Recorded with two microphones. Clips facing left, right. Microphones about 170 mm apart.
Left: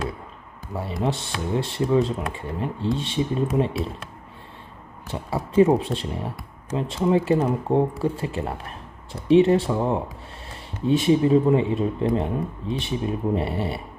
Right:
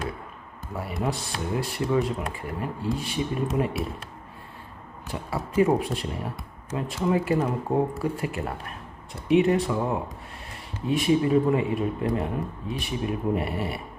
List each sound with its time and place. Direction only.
1.0 s a man's voice: 25° left (ahead or behind)
5.0 s a man's voice: 25° left (ahead or behind)